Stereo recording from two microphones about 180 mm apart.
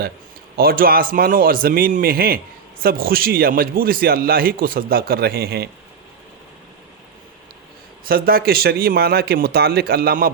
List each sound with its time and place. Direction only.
0.5 s a man's voice: 55° right (ahead or behind)
8.0 s a man's voice: 55° right (ahead or behind)